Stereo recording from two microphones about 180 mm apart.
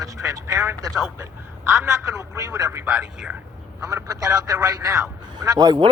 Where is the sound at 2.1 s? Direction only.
20° right (ahead or behind).